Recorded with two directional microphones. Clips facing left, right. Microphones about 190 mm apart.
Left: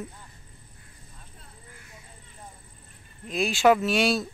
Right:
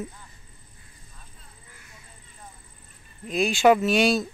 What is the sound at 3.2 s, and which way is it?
Speech, centre (ahead or behind).